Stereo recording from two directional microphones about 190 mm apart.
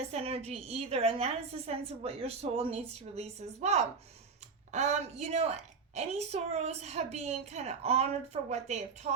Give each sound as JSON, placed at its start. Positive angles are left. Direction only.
{"t": 0.1, "sound": "a woman's voice", "side_deg": -35}